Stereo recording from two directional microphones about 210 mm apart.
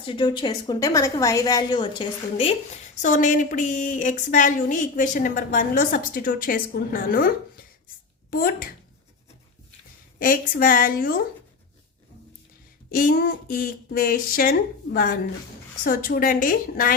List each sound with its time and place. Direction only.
0.0 s a woman's voice: 25° left (ahead or behind); by 8.7 s 45° left (ahead or behind)
10.2 s speech: 40° left (ahead or behind)
12.9 s speech: 45° left (ahead or behind)